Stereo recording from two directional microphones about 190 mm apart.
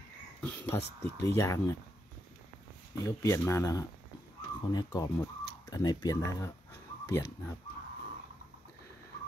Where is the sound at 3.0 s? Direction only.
15° left (ahead or behind).